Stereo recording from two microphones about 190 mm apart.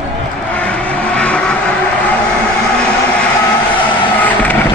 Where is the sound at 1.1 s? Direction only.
5° left (ahead or behind).